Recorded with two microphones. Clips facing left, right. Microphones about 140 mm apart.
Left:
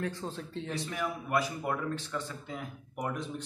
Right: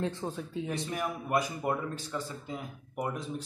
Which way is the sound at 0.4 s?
10° right (ahead or behind).